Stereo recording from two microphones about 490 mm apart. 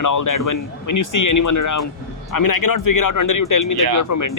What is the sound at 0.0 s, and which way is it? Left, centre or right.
Speech, left.